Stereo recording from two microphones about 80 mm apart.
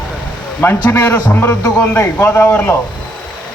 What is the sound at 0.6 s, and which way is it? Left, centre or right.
A man's voice, left.